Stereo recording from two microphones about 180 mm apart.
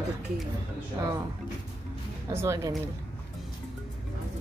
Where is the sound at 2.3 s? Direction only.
15° right (ahead or behind).